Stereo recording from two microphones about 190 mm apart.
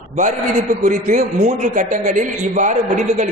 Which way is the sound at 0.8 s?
45° right (ahead or behind).